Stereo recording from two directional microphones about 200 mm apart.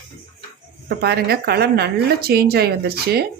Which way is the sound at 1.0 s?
55° right (ahead or behind).